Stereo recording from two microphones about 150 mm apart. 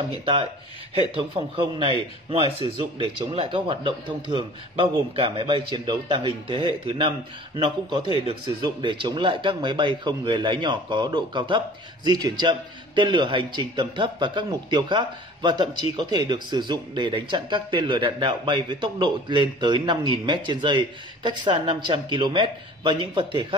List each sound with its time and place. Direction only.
0.2 s speech: 40° right (ahead or behind)